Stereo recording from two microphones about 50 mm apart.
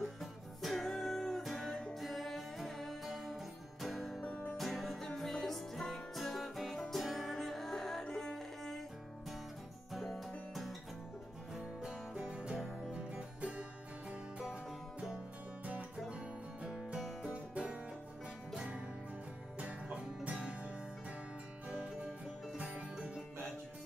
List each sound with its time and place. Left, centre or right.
0.0 s music: centre
4.3 s music: left
4.6 s music: centre
6.1 s music: centre
9.9 s music: centre
12.1 s music: centre
12.5 s music: centre
12.9 s music: right
17.2 s music: centre